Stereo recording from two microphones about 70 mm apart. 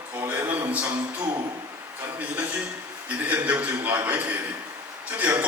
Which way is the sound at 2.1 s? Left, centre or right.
Right.